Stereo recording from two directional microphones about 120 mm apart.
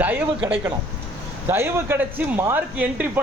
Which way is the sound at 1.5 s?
20° right (ahead or behind).